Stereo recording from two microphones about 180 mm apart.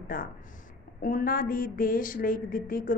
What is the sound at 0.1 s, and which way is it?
A woman's voice, 50° left (ahead or behind).